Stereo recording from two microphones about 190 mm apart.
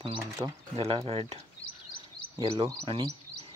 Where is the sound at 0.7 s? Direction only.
30° right (ahead or behind).